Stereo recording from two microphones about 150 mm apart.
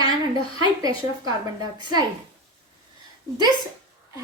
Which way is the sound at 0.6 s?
25° right (ahead or behind).